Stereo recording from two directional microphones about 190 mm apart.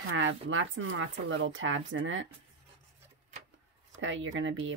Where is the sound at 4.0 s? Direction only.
85° right.